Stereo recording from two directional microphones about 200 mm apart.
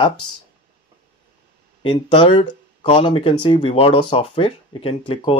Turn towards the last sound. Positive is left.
turn(degrees=25)  # may be behind; listen again after turning